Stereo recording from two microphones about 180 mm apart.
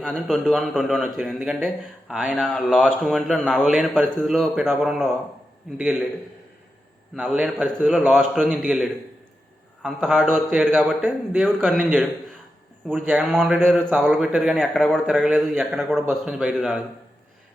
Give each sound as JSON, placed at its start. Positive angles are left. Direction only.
{"t": 0.0, "sound": "a man's voice", "side_deg": 5}
{"t": 7.2, "sound": "a man's voice", "side_deg": 0}
{"t": 13.6, "sound": "a man's voice", "side_deg": 5}